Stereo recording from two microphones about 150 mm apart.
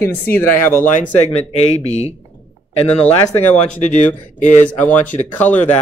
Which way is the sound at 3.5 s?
55° left (ahead or behind).